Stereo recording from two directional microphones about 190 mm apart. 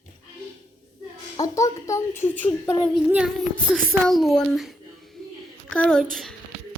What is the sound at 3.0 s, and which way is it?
A woman's voice, 5° right (ahead or behind).